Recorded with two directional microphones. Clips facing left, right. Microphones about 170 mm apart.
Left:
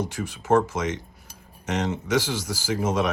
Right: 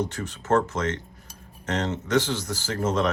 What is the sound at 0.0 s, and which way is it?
Speech, 10° left (ahead or behind).